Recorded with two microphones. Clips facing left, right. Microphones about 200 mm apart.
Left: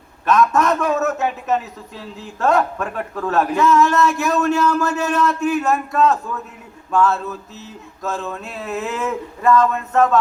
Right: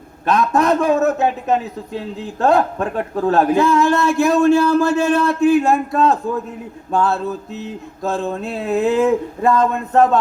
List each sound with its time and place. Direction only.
0.3 s a man's voice: 30° right (ahead or behind)